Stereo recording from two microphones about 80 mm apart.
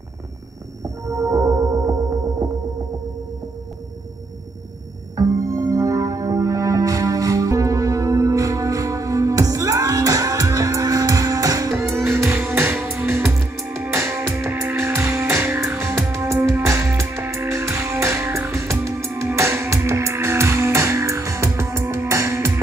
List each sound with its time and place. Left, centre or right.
1.0 s music: right
5.1 s music: right
11.9 s music: right